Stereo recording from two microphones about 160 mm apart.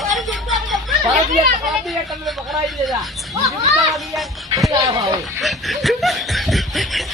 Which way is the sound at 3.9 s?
Centre (ahead or behind).